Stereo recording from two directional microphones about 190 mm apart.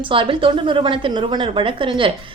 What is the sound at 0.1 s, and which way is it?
A woman's voice, 30° right (ahead or behind).